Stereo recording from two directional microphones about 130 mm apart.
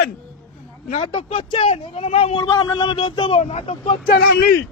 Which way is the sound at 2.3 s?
35° left (ahead or behind).